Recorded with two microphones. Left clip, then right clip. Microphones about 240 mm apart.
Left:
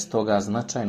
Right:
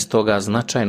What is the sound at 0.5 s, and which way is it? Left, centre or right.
Speech, right.